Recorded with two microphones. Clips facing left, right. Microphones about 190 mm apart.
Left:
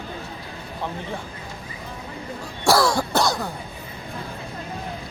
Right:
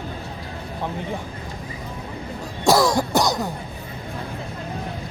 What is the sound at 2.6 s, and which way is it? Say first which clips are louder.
Throat clearing: right 2 dB; 20° right (ahead or behind).